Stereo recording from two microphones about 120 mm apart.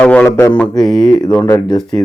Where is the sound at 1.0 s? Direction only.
35° left (ahead or behind).